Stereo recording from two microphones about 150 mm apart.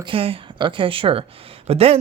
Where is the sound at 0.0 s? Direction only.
40° right (ahead or behind).